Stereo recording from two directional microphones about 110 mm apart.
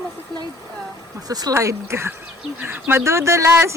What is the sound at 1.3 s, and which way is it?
Speech, 35° right (ahead or behind).